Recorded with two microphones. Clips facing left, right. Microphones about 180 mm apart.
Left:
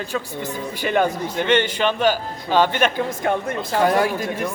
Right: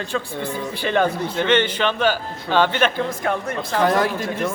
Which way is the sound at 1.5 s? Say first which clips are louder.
Left 1 dB; 45° left (ahead or behind).